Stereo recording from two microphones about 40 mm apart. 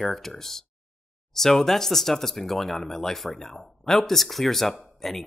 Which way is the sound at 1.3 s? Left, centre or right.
Centre.